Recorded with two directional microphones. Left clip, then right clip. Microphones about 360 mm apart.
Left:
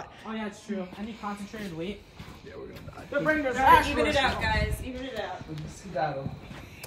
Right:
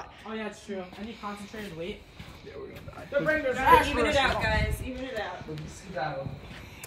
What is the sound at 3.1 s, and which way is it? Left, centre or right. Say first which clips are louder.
Speech: right 1 dB; centre.